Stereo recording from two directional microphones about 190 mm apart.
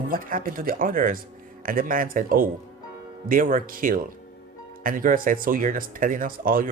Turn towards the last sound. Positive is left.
turn(degrees=-45)  # may be behind; listen again after turning